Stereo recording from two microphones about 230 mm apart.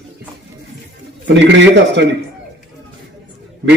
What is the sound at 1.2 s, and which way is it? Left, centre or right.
Speech, right.